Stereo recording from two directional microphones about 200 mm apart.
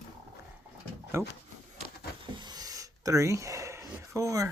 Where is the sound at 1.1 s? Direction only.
15° right (ahead or behind).